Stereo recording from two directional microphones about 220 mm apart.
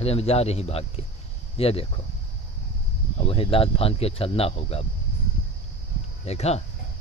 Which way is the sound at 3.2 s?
25° left (ahead or behind).